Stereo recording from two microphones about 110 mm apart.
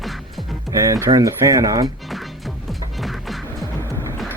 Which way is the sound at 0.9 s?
30° right (ahead or behind).